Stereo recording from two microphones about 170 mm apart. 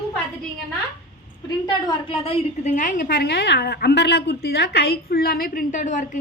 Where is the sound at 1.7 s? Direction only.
30° left (ahead or behind); by 3.1 s 50° left (ahead or behind).